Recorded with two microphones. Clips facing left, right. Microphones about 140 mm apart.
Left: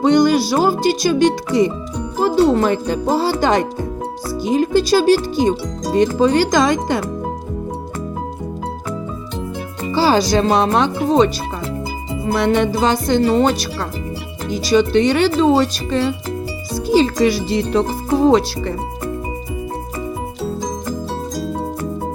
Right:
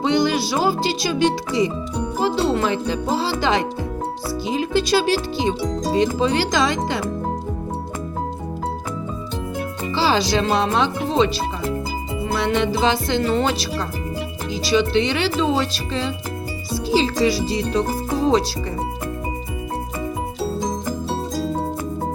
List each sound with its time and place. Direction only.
0.0 s speech: 45° left (ahead or behind)
4.4 s speech: 45° left (ahead or behind)
9.9 s speech: 45° left (ahead or behind)
12.4 s speech: 50° left (ahead or behind)
20.6 s music: 5° right (ahead or behind)